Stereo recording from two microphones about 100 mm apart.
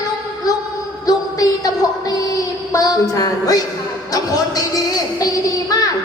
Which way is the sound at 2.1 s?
40° left (ahead or behind).